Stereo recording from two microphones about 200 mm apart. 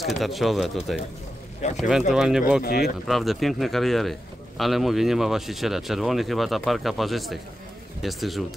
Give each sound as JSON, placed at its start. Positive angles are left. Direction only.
{"t": 0.0, "sound": "a man's voice", "side_deg": 0}
{"t": 2.6, "sound": "speech", "side_deg": 50}
{"t": 3.1, "sound": "a man's voice", "side_deg": 0}